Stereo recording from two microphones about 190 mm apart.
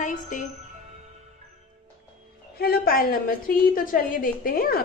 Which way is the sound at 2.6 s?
50° left (ahead or behind).